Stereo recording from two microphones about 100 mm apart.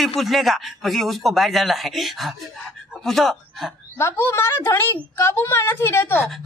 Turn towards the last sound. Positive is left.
turn(degrees=25)  # may be behind; listen again after turning